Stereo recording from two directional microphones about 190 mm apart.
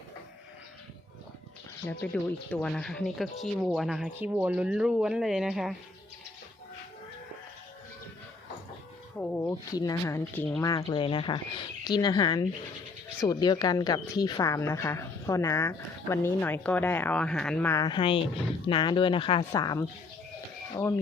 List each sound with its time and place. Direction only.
2.1 s speech: 5° left (ahead or behind)
9.1 s a sound: 5° left (ahead or behind)
9.7 s speech: 20° left (ahead or behind)
17.8 s speech: 25° left (ahead or behind)